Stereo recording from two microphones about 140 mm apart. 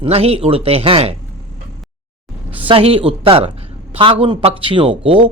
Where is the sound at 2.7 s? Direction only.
40° right (ahead or behind).